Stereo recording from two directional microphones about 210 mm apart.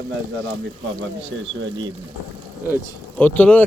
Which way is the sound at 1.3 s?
70° right (ahead or behind).